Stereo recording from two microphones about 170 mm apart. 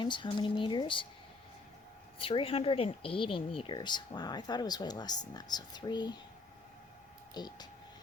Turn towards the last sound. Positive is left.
turn(degrees=25)  # may be behind; listen again after turning